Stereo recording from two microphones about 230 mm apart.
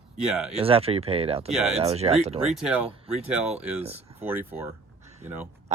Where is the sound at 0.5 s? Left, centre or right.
Right.